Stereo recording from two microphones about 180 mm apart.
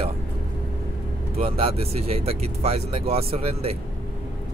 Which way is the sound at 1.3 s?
30° right (ahead or behind).